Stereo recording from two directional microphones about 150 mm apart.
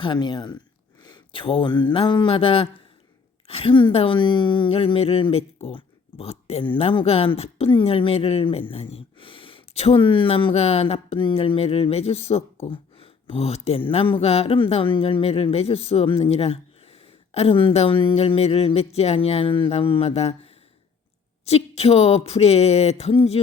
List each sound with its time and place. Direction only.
0.0 s speech: 30° left (ahead or behind)